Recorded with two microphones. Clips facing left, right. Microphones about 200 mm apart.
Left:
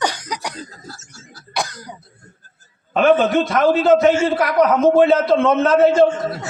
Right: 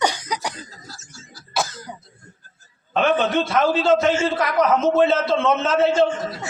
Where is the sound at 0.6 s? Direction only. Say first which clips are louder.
Left 4 dB; 55° left (ahead or behind).